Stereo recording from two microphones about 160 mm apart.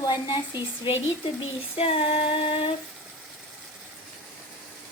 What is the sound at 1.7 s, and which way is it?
Female singing, 35° left (ahead or behind).